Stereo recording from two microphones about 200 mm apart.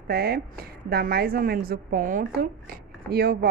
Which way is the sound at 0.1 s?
50° right (ahead or behind).